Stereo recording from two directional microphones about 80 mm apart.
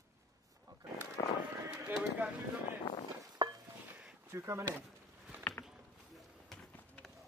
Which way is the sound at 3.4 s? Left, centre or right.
Right.